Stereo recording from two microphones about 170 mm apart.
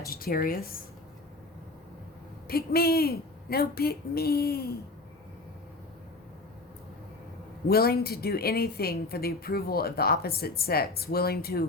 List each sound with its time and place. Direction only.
0.1 s a woman's voice: 60° left (ahead or behind)
2.5 s a woman's voice: 65° left (ahead or behind)
7.7 s a woman's voice: 65° left (ahead or behind)